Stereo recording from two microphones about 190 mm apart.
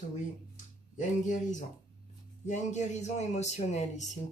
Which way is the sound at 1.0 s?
40° left (ahead or behind).